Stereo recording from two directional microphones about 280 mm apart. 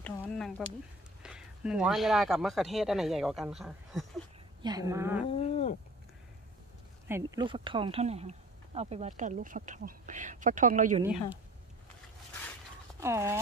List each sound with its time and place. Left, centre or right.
0.0 s speech: centre
4.6 s a woman's voice: centre
5.3 s cat: left
7.1 s speech: centre; by 11.0 s right
11.0 s speech: centre
13.0 s a woman's voice: centre